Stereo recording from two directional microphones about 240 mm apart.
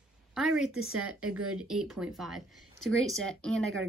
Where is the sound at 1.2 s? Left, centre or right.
Right.